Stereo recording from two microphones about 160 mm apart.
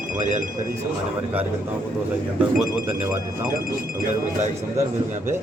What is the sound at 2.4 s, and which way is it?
Speech, 5° right (ahead or behind).